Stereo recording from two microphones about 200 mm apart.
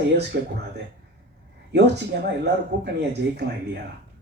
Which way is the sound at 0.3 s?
50° right (ahead or behind).